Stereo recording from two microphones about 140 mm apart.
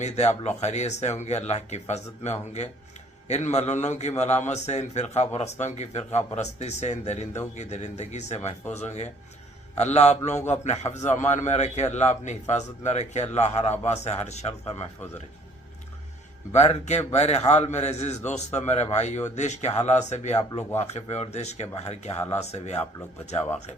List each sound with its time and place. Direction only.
0.0 s a man's voice: 55° left (ahead or behind)
16.5 s a man's voice: 50° left (ahead or behind)